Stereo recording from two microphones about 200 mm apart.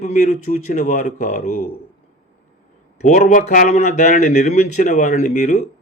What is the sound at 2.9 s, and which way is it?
Speech, 35° left (ahead or behind).